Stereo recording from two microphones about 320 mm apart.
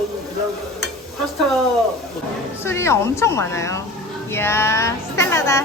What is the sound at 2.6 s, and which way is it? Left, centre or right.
A woman's voice, centre.